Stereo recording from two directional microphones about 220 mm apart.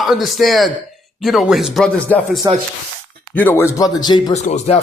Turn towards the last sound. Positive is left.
turn(degrees=30)  # may be behind; listen again after turning